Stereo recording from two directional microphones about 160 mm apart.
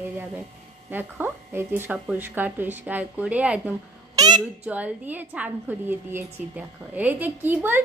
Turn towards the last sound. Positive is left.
turn(degrees=-10)  # may be behind; listen again after turning